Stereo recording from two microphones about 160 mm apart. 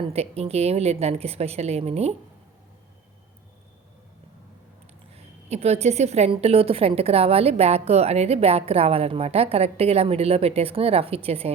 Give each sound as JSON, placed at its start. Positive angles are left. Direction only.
{"t": 0.0, "sound": "a woman's voice", "side_deg": -40}
{"t": 5.1, "sound": "a woman's voice", "side_deg": -40}